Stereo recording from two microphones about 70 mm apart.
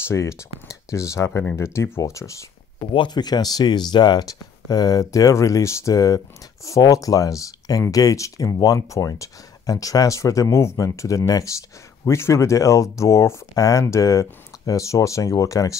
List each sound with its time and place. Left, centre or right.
0.1 s speech: left
2.8 s speech: left